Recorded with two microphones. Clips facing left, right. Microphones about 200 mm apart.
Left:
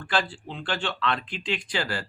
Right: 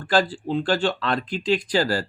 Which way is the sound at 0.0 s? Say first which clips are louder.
Right 7 dB; 40° right (ahead or behind).